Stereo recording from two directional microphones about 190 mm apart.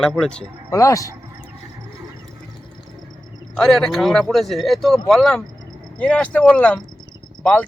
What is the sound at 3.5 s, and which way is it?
Speech, centre (ahead or behind).